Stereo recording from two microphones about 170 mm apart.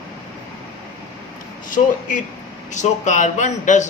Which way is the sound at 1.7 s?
50° left (ahead or behind).